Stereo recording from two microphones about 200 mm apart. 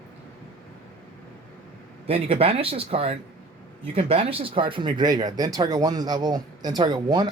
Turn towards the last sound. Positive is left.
turn(degrees=-20)  # may be behind; listen again after turning